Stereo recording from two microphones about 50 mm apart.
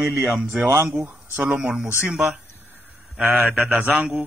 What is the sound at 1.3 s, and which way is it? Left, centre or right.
Speech, right.